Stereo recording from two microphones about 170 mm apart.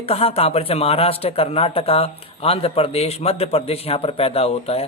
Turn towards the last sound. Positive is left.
turn(degrees=35)  # may be behind; listen again after turning